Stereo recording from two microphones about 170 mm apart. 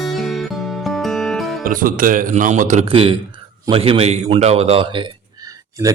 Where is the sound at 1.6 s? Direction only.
55° right (ahead or behind).